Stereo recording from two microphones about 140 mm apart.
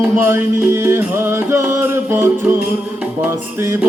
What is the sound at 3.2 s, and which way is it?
Chant, 20° right (ahead or behind).